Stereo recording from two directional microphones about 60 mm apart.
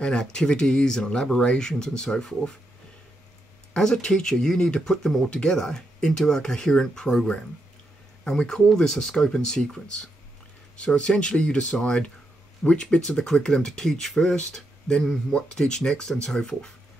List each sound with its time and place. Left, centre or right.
0.0 s speech: centre
3.7 s speech: centre